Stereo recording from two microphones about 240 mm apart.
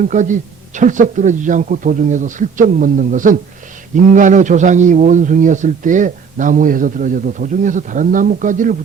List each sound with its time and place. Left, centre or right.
0.1 s a man's voice: right